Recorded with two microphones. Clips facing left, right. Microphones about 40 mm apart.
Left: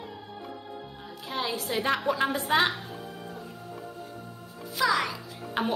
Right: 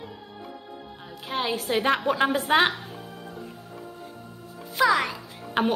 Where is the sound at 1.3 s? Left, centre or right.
Right.